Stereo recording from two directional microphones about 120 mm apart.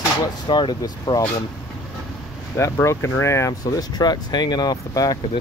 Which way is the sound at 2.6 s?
20° left (ahead or behind).